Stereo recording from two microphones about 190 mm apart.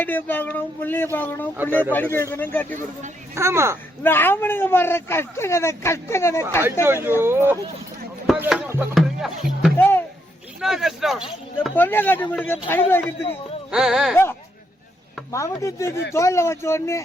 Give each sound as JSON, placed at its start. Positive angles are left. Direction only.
{"t": 0.0, "sound": "speech", "side_deg": 10}
{"t": 3.3, "sound": "speech", "side_deg": -15}
{"t": 4.0, "sound": "speech", "side_deg": 10}
{"t": 6.8, "sound": "speech", "side_deg": -10}
{"t": 8.3, "sound": "music", "side_deg": -5}
{"t": 9.7, "sound": "music", "side_deg": 10}
{"t": 10.6, "sound": "speech", "side_deg": 0}
{"t": 11.7, "sound": "speech", "side_deg": 10}
{"t": 13.7, "sound": "speech", "side_deg": -5}
{"t": 15.3, "sound": "speech", "side_deg": 15}